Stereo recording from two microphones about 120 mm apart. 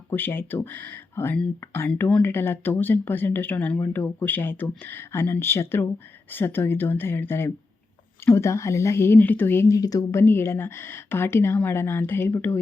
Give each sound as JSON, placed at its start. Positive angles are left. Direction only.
{"t": 0.1, "sound": "speech", "side_deg": 20}
{"t": 1.9, "sound": "speech", "side_deg": 10}